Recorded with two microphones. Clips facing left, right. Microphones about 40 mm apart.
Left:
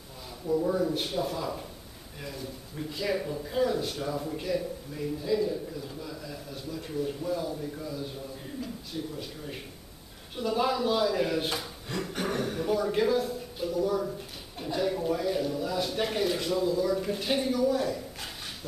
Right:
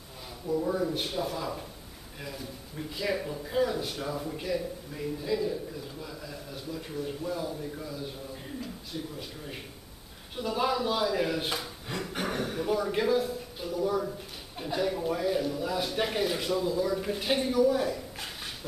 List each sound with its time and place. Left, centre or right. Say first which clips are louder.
0.5 s a man's voice: left 2 dB; centre